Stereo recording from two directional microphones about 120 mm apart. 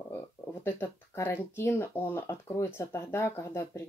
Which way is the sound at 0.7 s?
20° left (ahead or behind).